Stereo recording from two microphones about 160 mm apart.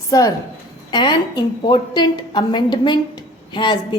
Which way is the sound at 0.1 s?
20° left (ahead or behind).